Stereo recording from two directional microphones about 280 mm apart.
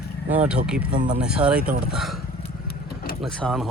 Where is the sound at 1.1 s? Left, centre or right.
Centre.